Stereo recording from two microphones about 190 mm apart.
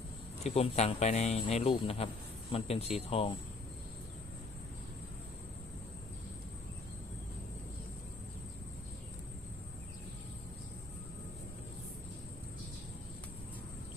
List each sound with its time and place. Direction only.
0.4 s speech: 35° left (ahead or behind)